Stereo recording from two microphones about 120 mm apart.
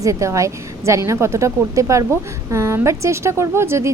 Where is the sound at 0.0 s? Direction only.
25° right (ahead or behind).